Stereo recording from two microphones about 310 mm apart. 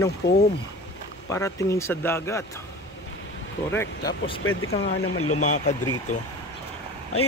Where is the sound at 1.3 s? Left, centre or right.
Centre.